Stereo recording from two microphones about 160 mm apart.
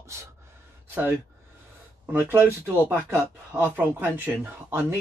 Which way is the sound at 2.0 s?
10° right (ahead or behind).